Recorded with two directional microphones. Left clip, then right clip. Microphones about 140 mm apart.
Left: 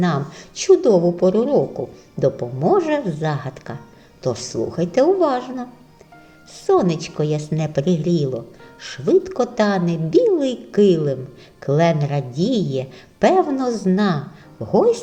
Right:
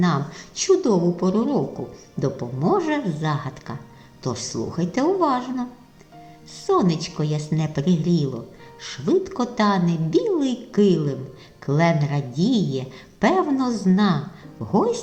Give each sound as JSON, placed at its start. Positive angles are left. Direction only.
{"t": 0.0, "sound": "a woman's voice", "side_deg": 30}